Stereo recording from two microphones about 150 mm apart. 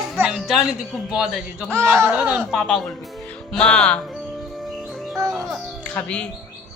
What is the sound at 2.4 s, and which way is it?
Speech, centre (ahead or behind).